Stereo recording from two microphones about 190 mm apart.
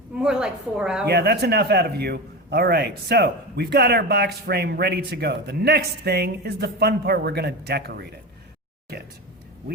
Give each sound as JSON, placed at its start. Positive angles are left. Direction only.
{"t": 0.2, "sound": "a woman's voice", "side_deg": -5}
{"t": 1.0, "sound": "a man's voice", "side_deg": -55}